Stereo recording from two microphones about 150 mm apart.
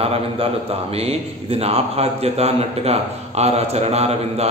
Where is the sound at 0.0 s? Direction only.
40° right (ahead or behind).